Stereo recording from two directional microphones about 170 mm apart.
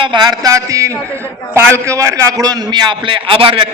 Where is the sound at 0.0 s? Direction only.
25° right (ahead or behind).